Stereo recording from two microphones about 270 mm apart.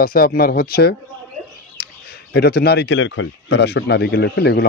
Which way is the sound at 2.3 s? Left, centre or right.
Left.